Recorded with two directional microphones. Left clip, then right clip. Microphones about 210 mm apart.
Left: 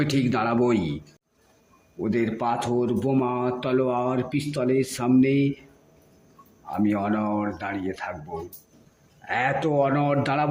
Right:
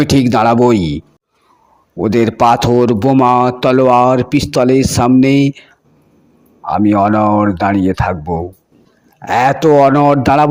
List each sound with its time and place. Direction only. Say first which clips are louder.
0.0 s a man's voice: right 13 dB; 35° right (ahead or behind)
2.0 s a man's voice: right 14 dB; 35° right (ahead or behind)
6.7 s a man's voice: right 14 dB; 35° right (ahead or behind)
9.2 s a man's voice: right 14 dB; 30° right (ahead or behind)